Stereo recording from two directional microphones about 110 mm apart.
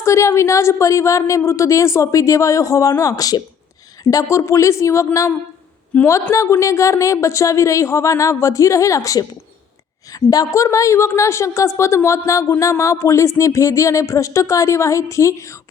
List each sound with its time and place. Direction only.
0.0 s a woman's voice: 25° left (ahead or behind)
5.9 s a woman's voice: 15° left (ahead or behind)
6.3 s a woman's voice: 25° left (ahead or behind)